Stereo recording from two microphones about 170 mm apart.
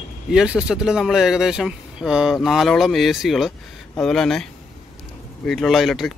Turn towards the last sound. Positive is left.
turn(degrees=0)  # may be behind; listen again after turning